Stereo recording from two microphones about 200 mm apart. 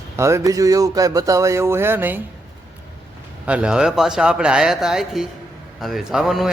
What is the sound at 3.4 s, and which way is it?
Speech, 5° right (ahead or behind).